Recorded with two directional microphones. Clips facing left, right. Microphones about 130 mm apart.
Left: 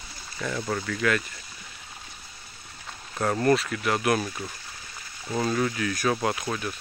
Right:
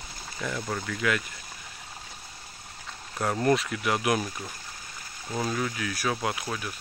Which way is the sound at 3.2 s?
10° right (ahead or behind).